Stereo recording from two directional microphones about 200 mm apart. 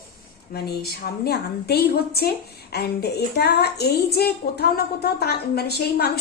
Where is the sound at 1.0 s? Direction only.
50° left (ahead or behind).